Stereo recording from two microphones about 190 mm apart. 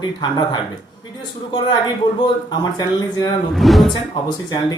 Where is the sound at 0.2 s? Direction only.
25° left (ahead or behind).